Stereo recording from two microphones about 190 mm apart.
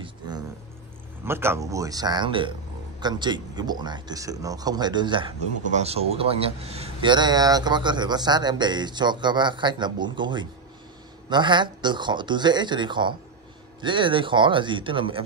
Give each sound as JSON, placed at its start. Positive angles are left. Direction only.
{"t": 1.2, "sound": "speech", "side_deg": -10}